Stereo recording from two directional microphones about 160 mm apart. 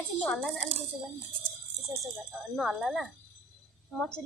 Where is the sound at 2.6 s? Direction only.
Centre (ahead or behind).